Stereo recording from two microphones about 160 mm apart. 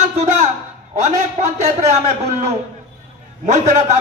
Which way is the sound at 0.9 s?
50° right (ahead or behind).